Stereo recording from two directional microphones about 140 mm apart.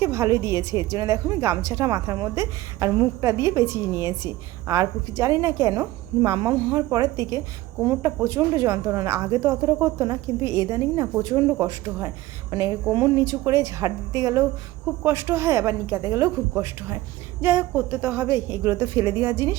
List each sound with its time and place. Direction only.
0.0 s a woman's voice: 20° right (ahead or behind)
17.4 s a woman's voice: 10° right (ahead or behind)